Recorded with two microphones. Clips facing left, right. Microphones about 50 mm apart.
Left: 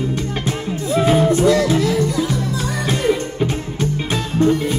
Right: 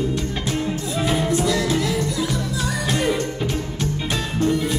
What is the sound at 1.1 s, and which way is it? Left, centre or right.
Music, left.